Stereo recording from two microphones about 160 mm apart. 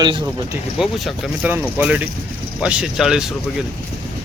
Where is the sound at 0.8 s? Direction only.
5° right (ahead or behind).